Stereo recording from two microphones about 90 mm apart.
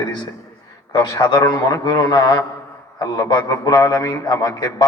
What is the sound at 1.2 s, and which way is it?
A man's voice, 50° left (ahead or behind).